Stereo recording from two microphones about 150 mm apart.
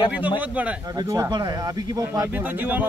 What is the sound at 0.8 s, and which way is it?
Speech, 25° right (ahead or behind).